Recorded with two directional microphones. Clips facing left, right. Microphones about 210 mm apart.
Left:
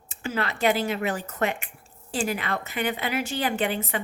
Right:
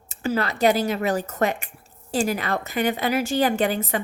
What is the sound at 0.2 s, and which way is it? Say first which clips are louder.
A woman's voice: right 5 dB; 40° right (ahead or behind).